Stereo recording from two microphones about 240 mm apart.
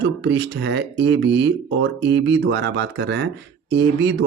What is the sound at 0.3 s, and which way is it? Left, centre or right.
Speech, right.